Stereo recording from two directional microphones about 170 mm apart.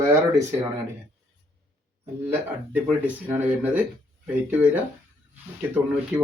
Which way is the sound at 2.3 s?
10° right (ahead or behind).